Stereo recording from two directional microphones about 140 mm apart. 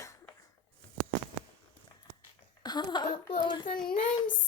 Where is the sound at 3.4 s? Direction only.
30° left (ahead or behind).